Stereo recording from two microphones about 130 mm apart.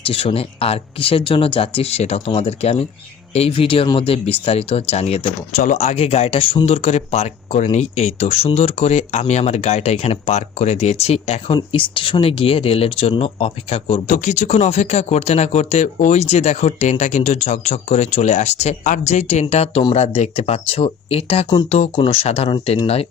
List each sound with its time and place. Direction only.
0.0 s speech: 45° left (ahead or behind)
14.1 s speech: 70° left (ahead or behind); by 22.5 s 50° left (ahead or behind)